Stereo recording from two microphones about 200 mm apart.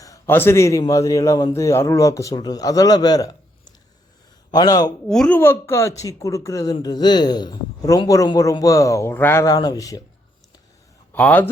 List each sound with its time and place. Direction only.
0.0 s a man's voice: 15° left (ahead or behind)
4.5 s a man's voice: 20° left (ahead or behind)
5.0 s a man's voice: 5° left (ahead or behind)
11.1 s speech: 10° left (ahead or behind)